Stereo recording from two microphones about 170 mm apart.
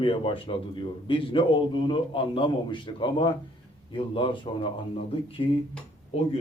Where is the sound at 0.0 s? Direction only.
30° left (ahead or behind).